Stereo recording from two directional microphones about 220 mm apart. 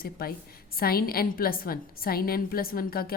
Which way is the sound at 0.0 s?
45° left (ahead or behind).